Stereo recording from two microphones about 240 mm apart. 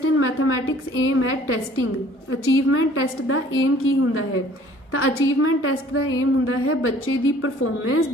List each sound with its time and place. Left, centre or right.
0.2 s a woman's voice: left